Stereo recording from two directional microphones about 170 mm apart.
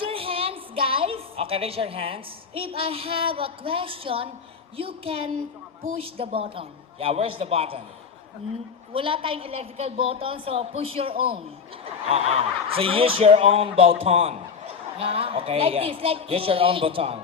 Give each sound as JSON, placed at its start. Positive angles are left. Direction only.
{"t": 0.0, "sound": "a woman's voice", "side_deg": -35}
{"t": 8.9, "sound": "speech", "side_deg": -30}